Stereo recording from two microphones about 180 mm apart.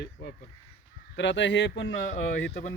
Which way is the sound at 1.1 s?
90° left.